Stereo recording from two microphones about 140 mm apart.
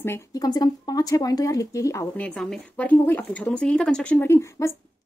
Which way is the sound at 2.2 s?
5° left (ahead or behind).